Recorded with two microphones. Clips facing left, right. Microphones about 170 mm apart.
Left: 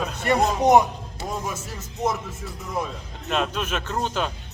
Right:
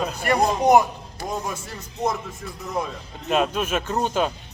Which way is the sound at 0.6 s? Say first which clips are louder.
Even; 20° left (ahead or behind).